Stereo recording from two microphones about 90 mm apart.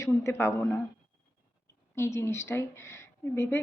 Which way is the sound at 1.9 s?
30° left (ahead or behind).